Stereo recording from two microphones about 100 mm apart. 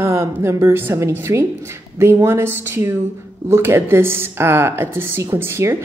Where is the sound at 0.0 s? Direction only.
25° right (ahead or behind).